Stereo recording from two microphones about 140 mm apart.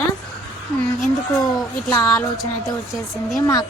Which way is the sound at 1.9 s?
10° left (ahead or behind).